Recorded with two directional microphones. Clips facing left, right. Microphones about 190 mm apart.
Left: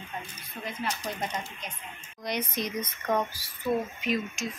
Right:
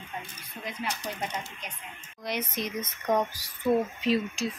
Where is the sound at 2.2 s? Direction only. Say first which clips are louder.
Left 1 dB; 5° right (ahead or behind).